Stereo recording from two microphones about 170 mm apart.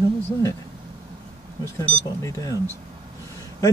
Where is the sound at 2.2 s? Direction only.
20° left (ahead or behind).